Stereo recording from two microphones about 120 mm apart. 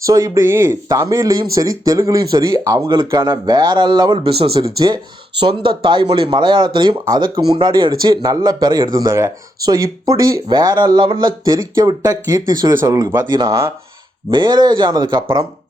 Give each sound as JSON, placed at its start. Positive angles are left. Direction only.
{"t": 0.0, "sound": "speech", "side_deg": -30}
{"t": 4.2, "sound": "speech", "side_deg": -50}
{"t": 14.3, "sound": "speech", "side_deg": -40}